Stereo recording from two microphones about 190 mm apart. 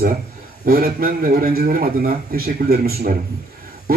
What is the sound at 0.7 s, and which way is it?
A man's voice, 50° right (ahead or behind).